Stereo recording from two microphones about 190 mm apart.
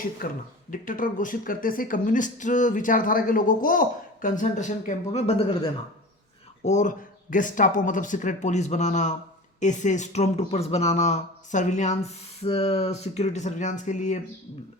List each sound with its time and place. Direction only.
0.2 s speech: 45° left (ahead or behind); by 5.5 s 30° left (ahead or behind)
6.7 s speech: 40° left (ahead or behind)